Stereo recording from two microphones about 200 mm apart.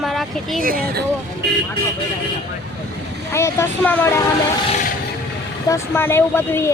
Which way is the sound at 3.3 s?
15° left (ahead or behind).